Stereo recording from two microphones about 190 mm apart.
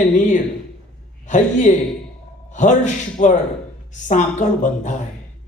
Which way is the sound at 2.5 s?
40° left (ahead or behind).